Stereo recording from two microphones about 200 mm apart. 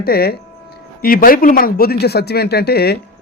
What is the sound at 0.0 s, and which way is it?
A man's voice, 50° left (ahead or behind).